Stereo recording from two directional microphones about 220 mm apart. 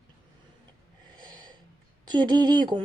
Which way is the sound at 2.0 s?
20° right (ahead or behind).